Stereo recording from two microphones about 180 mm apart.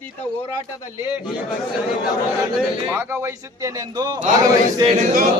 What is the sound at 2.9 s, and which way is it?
Speech, 15° right (ahead or behind).